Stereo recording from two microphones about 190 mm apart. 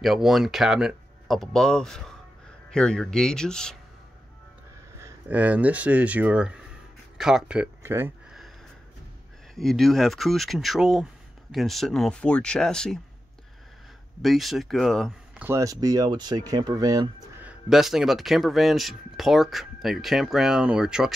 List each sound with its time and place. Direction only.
0.0 s speech: centre (ahead or behind)
5.0 s speech: 10° right (ahead or behind)
9.6 s speech: centre (ahead or behind)
14.2 s speech: centre (ahead or behind)
15.4 s speech: 15° right (ahead or behind)
17.5 s speech: centre (ahead or behind)